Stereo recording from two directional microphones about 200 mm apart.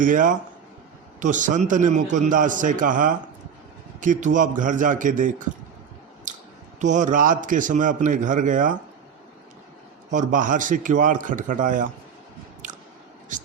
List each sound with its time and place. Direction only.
0.0 s a man's voice: 40° right (ahead or behind)
6.3 s a sound: 40° right (ahead or behind)
6.7 s a man's voice: 40° right (ahead or behind)
10.1 s a man's voice: 40° right (ahead or behind)